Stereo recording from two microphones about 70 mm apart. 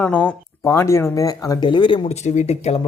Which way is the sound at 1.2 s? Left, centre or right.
Left.